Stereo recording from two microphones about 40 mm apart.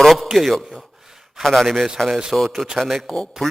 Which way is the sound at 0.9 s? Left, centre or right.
Centre.